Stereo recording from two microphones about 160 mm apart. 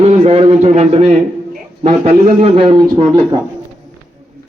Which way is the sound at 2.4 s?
35° right (ahead or behind).